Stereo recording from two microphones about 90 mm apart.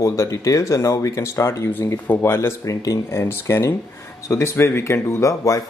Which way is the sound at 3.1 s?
30° left (ahead or behind).